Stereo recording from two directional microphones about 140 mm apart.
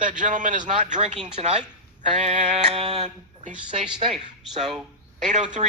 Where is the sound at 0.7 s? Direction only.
55° right (ahead or behind).